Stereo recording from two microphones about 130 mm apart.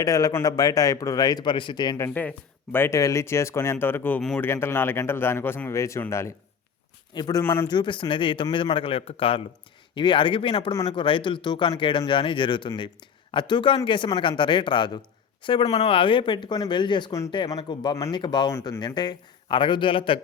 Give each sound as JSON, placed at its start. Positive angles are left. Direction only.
{"t": 0.0, "sound": "a man's voice", "side_deg": 30}
{"t": 2.0, "sound": "a man's voice", "side_deg": 10}
{"t": 7.1, "sound": "speech", "side_deg": 30}
{"t": 7.4, "sound": "a man's voice", "side_deg": 20}
{"t": 7.7, "sound": "speech", "side_deg": 35}